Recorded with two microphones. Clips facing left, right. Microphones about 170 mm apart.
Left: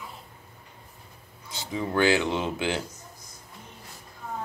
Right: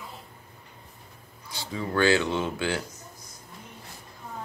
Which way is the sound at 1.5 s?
20° left (ahead or behind).